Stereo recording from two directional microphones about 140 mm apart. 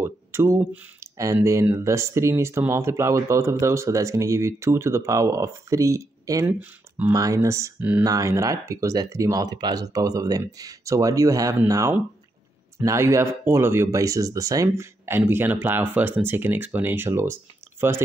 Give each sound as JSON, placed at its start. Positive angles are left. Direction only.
{"t": 0.0, "sound": "a sound", "side_deg": -20}
{"t": 1.1, "sound": "speech", "side_deg": -20}
{"t": 6.4, "sound": "speech", "side_deg": -10}
{"t": 7.1, "sound": "speech", "side_deg": -25}